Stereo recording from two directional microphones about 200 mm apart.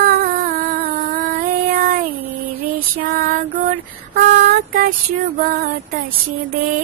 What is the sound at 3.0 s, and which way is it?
Female singing, 45° right (ahead or behind).